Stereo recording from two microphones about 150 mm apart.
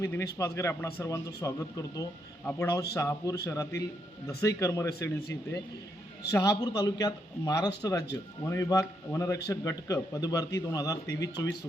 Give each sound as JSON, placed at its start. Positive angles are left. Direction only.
{"t": 0.0, "sound": "a man's voice", "side_deg": 20}